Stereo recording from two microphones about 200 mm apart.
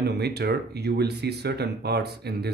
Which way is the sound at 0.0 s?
55° right (ahead or behind).